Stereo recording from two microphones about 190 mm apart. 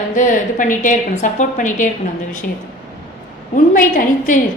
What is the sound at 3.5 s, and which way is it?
Speech, 45° left (ahead or behind).